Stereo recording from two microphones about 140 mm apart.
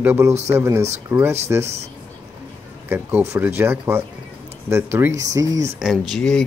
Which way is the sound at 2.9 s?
15° right (ahead or behind).